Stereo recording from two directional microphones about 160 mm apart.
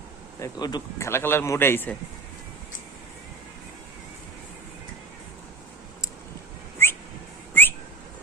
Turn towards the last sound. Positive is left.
turn(degrees=15)  # may be behind; listen again after turning